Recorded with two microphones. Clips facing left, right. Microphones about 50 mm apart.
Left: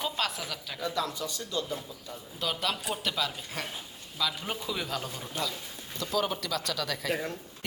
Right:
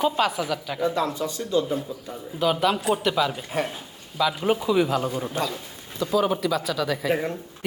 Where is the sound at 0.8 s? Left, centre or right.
Right.